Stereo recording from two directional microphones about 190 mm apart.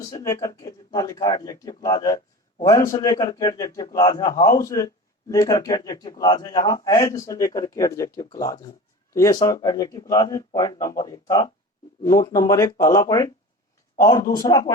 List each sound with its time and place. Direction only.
0.2 s speech: 15° left (ahead or behind)